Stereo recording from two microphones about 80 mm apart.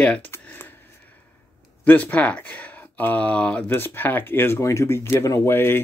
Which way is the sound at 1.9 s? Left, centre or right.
Left.